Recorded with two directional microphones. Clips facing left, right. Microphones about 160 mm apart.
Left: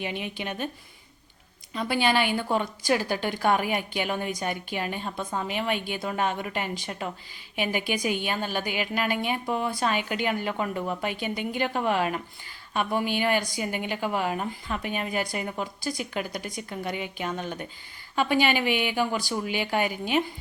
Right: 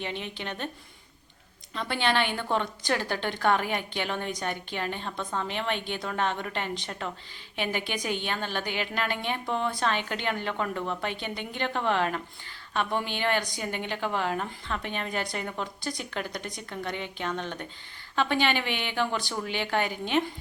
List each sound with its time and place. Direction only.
0.0 s a woman's voice: 10° left (ahead or behind)
1.7 s a woman's voice: 10° left (ahead or behind)